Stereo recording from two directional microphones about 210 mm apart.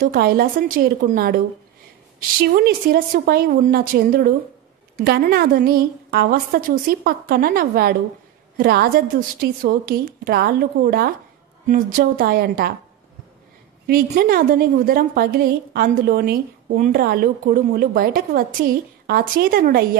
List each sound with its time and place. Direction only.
0.0 s a woman's voice: 45° right (ahead or behind)
2.4 s a woman's voice: 45° right (ahead or behind)
13.8 s a woman's voice: 45° right (ahead or behind)